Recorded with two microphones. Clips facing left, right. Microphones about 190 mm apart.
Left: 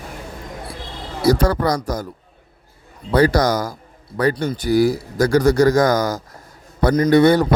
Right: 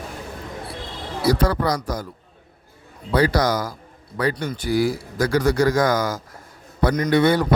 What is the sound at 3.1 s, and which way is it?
A man's voice, 45° left (ahead or behind).